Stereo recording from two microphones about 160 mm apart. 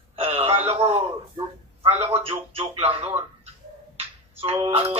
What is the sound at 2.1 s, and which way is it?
Speech, 35° right (ahead or behind).